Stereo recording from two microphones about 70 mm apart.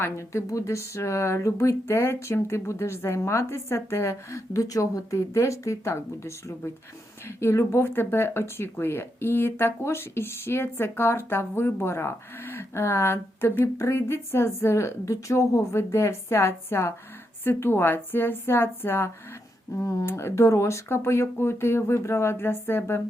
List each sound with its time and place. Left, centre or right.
0.5 s speech: left
19.8 s speech: left
20.1 s speech: left